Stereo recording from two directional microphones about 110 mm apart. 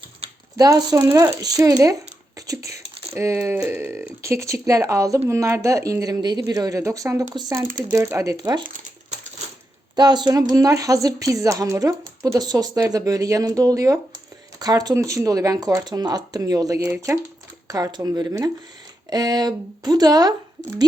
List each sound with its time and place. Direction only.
0.5 s speech: 35° right (ahead or behind)
7.6 s speech: 20° right (ahead or behind); by 8.6 s 35° right (ahead or behind)
9.9 s speech: 40° right (ahead or behind)